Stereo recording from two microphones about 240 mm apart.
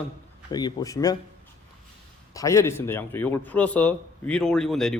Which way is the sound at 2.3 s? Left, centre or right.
Centre.